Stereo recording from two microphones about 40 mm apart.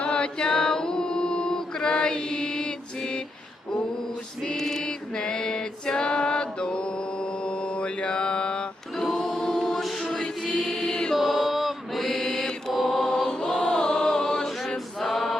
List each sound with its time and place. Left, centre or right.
0.0 s chant: left
4.5 s a sound: centre
9.1 s choir: centre
11.1 s chant: centre
12.0 s mantra: centre
12.7 s choir: centre
13.0 s chant: centre
13.7 s music: centre
15.0 s mantra: centre